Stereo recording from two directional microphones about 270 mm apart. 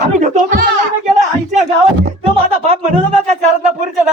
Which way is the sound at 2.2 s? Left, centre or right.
Right.